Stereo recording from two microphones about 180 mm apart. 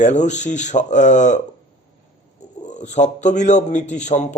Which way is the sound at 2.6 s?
40° left (ahead or behind).